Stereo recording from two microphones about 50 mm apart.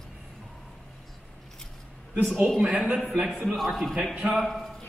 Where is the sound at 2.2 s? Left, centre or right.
Centre.